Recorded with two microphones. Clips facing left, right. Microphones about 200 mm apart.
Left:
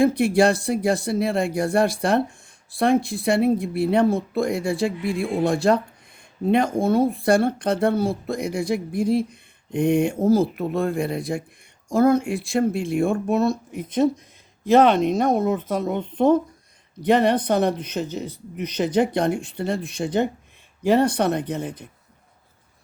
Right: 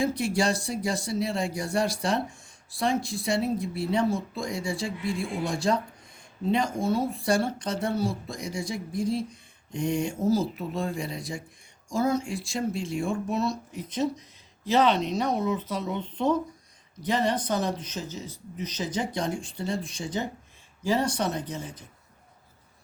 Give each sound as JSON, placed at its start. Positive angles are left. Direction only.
{"t": 0.0, "sound": "speech", "side_deg": 55}